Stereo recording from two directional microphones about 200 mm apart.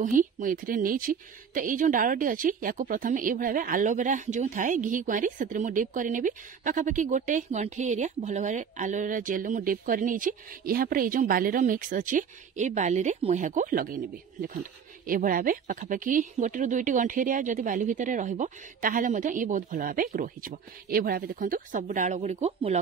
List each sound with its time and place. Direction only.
0.0 s a woman's voice: 40° right (ahead or behind)